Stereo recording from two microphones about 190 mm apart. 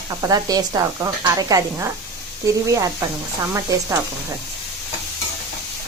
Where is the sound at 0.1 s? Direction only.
20° right (ahead or behind).